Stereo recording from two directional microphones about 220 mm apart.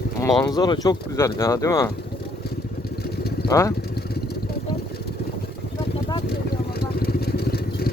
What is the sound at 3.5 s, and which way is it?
Speech, 15° left (ahead or behind).